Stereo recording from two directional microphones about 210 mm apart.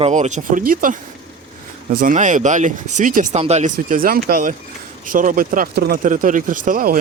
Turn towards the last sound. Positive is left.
turn(degrees=-40)  # may be behind; listen again after turning